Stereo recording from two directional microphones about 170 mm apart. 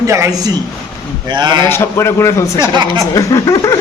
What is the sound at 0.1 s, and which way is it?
A man's voice, 20° right (ahead or behind).